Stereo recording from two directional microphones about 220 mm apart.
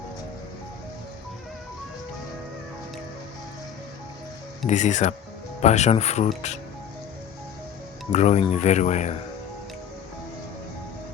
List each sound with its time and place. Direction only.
4.6 s speech: 35° left (ahead or behind)
8.1 s speech: 30° left (ahead or behind)